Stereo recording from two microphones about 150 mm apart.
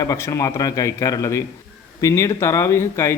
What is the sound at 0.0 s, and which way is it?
A man's voice, 20° left (ahead or behind).